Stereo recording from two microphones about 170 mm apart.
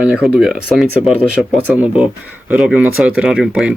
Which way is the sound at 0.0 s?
5° right (ahead or behind).